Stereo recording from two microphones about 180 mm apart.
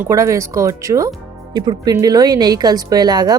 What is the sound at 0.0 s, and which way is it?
Speech, 15° right (ahead or behind).